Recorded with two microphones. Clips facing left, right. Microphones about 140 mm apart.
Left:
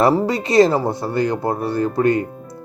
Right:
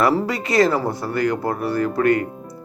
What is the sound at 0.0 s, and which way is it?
Speech, 20° left (ahead or behind).